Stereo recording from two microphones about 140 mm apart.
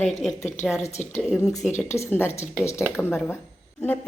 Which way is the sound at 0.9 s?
55° left (ahead or behind).